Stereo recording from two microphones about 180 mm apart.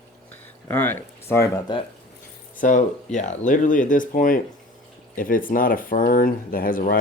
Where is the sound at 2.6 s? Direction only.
45° left (ahead or behind).